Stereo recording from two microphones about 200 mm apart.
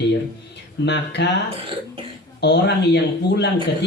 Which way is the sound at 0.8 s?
60° left (ahead or behind).